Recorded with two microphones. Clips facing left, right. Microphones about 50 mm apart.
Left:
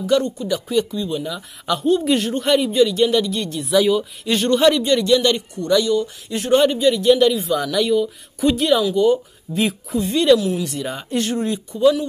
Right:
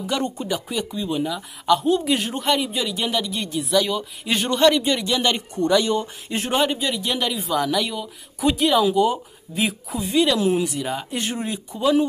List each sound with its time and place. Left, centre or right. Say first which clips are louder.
0.1 s speech: left 6 dB; centre
0.9 s speech: left 1 dB; centre
1.2 s speech: right 2 dB; centre
5.8 s speech: left 3 dB; right
6.5 s speech: left 8 dB; centre
11.1 s speech: left 5 dB; centre